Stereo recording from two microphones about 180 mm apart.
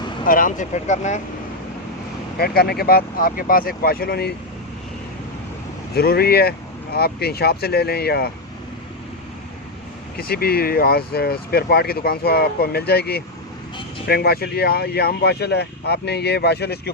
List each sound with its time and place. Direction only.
0.3 s speech: 50° left (ahead or behind)
2.4 s speech: 60° left (ahead or behind)
5.9 s speech: 60° left (ahead or behind)
10.2 s speech: 60° left (ahead or behind)